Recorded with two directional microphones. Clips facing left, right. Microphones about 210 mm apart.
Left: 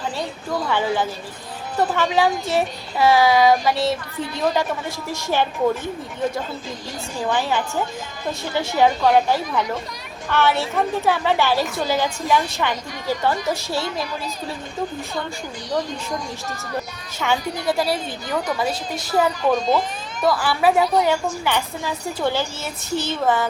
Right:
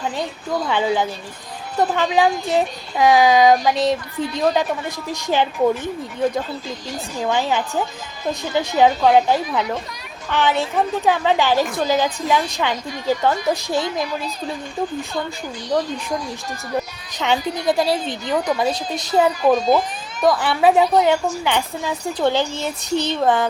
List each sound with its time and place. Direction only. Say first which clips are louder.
0.7 s a woman's voice: right 2 dB; 15° right (ahead or behind)
7.2 s a woman's voice: right 1 dB; 15° right (ahead or behind)
17.2 s a woman's voice: right 2 dB; 20° right (ahead or behind)
19.5 s a woman's voice: right 4 dB; 10° right (ahead or behind)
20.2 s a woman's voice: right 3 dB; 20° right (ahead or behind)